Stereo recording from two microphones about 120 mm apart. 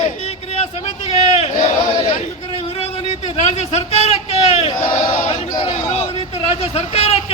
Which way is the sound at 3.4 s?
65° left (ahead or behind).